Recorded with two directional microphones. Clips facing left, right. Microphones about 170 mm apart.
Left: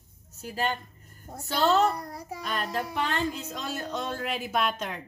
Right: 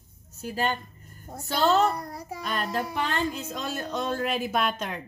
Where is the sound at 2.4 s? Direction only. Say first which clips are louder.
Right 2 dB; 50° right (ahead or behind).